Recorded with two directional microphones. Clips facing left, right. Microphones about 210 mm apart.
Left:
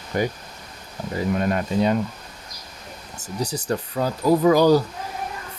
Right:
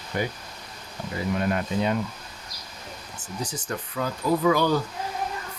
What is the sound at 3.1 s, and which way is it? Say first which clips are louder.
Speech: left 6 dB; 40° left (ahead or behind).